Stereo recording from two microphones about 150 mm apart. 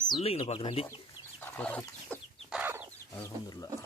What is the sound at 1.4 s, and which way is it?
Chicken, 10° left (ahead or behind).